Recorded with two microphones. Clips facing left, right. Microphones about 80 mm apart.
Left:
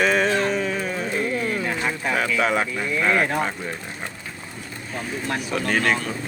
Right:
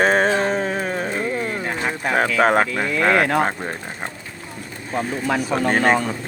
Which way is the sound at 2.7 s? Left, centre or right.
Right.